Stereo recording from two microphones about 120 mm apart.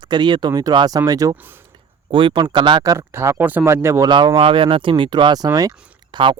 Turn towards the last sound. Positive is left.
turn(degrees=-40)  # may be behind; listen again after turning